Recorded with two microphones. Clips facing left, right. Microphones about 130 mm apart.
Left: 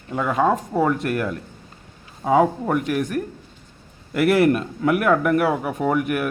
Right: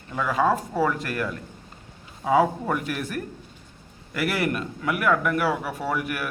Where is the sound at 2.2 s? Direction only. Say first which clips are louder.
Left 3 dB; 15° left (ahead or behind).